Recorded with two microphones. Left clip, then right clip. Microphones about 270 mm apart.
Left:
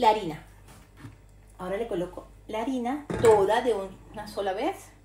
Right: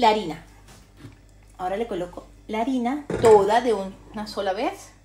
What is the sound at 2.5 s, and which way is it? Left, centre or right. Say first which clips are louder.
Speech: right 5 dB; right.